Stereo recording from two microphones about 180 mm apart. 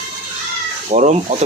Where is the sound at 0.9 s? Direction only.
40° right (ahead or behind).